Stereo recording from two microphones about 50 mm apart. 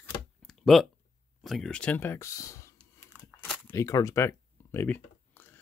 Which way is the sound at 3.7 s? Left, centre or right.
Left.